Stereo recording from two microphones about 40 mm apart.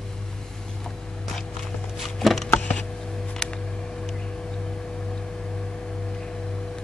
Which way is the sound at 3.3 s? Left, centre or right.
Centre.